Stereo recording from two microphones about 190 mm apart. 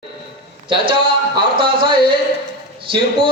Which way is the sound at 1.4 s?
25° right (ahead or behind).